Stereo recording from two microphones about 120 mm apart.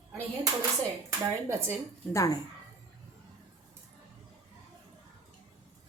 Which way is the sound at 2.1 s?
30° left (ahead or behind).